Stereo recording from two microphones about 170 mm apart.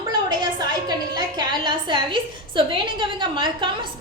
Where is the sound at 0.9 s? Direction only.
25° right (ahead or behind).